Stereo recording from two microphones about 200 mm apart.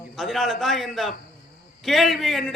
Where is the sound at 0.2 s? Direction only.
Centre (ahead or behind).